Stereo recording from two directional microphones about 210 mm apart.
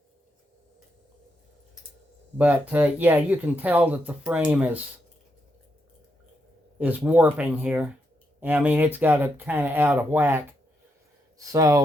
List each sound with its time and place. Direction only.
2.4 s speech: 10° right (ahead or behind)
6.7 s speech: 10° right (ahead or behind)